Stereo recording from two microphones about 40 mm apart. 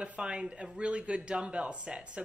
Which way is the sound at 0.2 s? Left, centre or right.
Right.